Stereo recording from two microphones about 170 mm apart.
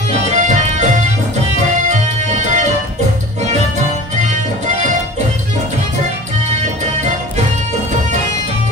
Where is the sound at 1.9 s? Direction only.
45° right (ahead or behind).